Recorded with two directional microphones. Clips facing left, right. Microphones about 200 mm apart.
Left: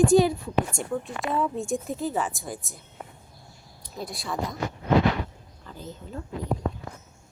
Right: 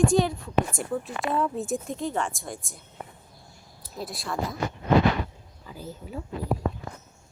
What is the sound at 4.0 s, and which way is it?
Speech, centre (ahead or behind).